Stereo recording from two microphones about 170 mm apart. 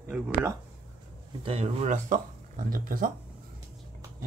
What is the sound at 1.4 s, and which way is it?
Speech, 35° right (ahead or behind).